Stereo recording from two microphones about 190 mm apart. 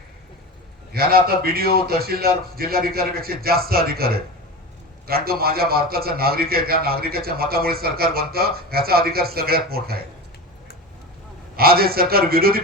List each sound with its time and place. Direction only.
0.9 s a man's voice: 55° right (ahead or behind)
11.5 s a man's voice: 55° right (ahead or behind)